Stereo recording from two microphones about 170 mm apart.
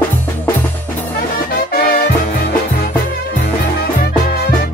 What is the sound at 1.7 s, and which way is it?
Music, 65° left (ahead or behind).